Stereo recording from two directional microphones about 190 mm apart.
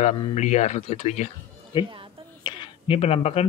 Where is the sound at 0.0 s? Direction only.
40° left (ahead or behind).